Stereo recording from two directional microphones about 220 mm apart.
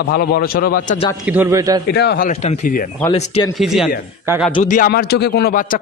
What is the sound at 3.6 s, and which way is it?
Speech, centre (ahead or behind).